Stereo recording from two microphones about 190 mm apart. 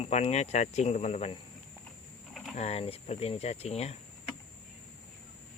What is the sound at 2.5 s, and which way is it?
Speech, 35° left (ahead or behind).